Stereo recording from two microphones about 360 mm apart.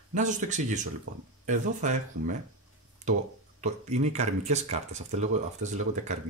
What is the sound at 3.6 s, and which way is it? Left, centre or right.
Speech, centre.